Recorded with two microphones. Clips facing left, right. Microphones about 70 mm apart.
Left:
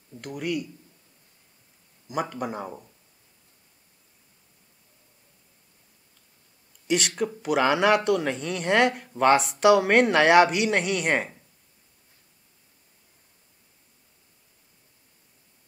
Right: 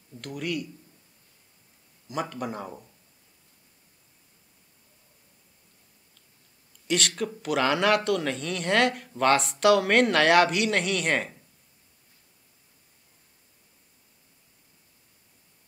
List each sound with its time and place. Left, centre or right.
0.2 s speech: centre
2.0 s speech: centre
6.9 s speech: centre